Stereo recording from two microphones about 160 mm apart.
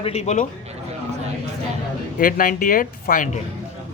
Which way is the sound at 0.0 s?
45° left (ahead or behind).